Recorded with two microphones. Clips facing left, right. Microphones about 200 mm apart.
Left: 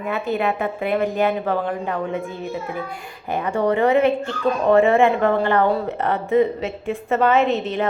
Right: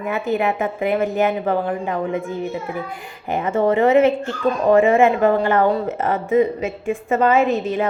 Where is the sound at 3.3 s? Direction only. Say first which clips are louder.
Right 2 dB; 20° right (ahead or behind).